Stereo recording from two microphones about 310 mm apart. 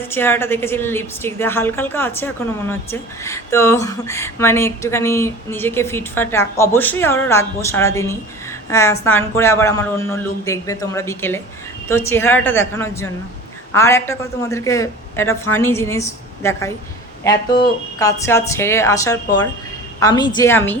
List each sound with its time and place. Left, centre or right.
0.1 s a woman's voice: centre
18.0 s a woman's voice: centre